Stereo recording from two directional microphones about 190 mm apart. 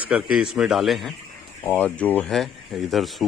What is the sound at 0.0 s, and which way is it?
Speech, 5° right (ahead or behind).